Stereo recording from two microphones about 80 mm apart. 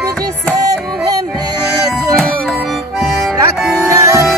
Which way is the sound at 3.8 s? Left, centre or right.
Right.